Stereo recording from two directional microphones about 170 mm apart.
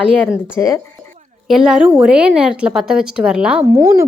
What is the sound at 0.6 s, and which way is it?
Speech, 10° left (ahead or behind).